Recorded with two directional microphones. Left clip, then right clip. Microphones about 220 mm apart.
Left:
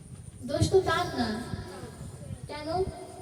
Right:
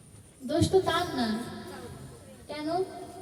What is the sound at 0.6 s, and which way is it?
Speech, 35° right (ahead or behind).